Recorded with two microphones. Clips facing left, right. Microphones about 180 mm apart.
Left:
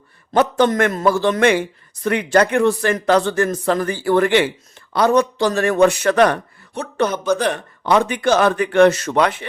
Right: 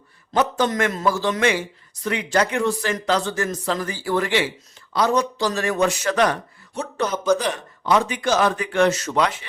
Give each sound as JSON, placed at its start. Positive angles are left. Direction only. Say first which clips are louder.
{"t": 0.3, "sound": "speech", "louder": "left 5 dB", "side_deg": 60}